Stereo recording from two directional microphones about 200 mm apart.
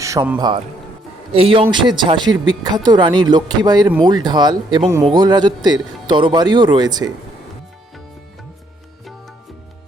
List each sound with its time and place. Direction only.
0.0 s a man's voice: 15° right (ahead or behind)